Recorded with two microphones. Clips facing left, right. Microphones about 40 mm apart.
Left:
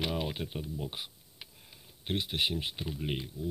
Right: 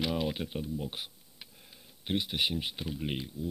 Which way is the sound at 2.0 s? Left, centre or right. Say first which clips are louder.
Right 1 dB; centre.